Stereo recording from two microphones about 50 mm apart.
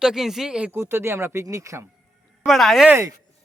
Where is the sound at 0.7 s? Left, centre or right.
Right.